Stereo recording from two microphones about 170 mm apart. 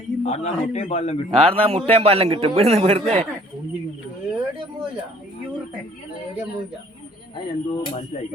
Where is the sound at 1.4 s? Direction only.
35° right (ahead or behind).